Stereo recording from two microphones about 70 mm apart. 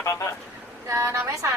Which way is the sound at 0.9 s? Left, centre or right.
Right.